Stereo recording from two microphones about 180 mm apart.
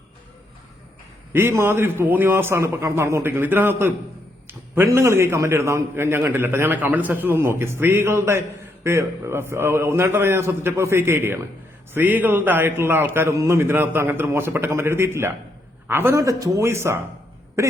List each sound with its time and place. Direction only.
1.3 s a man's voice: 10° right (ahead or behind)